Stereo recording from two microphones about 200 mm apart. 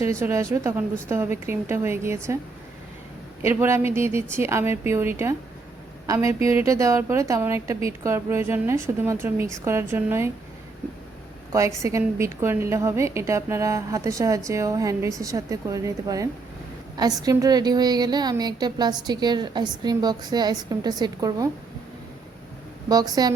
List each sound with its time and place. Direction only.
0.0 s a woman's voice: 15° right (ahead or behind)
3.4 s a woman's voice: 10° right (ahead or behind)
11.8 s a woman's voice: 15° right (ahead or behind)
22.9 s a woman's voice: 20° right (ahead or behind)